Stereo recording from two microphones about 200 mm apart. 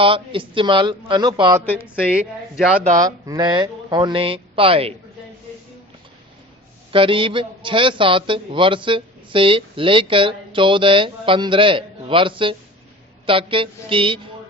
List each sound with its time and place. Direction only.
0.0 s a man's voice: 25° right (ahead or behind)
2.1 s speech: 5° right (ahead or behind)
3.0 s a man's voice: 20° right (ahead or behind)
6.9 s a man's voice: 25° right (ahead or behind)